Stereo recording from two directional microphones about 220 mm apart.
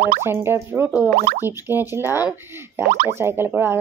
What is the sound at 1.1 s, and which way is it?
Speech, 40° right (ahead or behind).